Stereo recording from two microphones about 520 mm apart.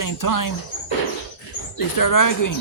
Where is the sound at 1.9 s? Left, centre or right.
Left.